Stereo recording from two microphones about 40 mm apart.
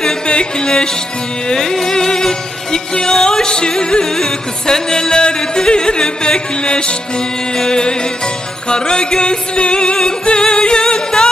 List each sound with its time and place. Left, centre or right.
0.0 s music: left